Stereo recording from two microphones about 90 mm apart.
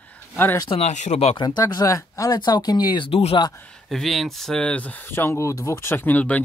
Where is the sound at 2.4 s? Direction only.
55° left (ahead or behind).